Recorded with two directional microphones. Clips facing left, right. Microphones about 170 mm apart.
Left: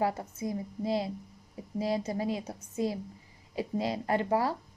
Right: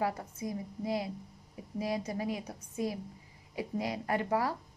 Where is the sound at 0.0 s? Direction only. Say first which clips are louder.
Left 3 dB; 25° left (ahead or behind).